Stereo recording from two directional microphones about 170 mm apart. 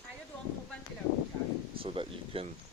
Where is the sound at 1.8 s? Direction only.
30° right (ahead or behind).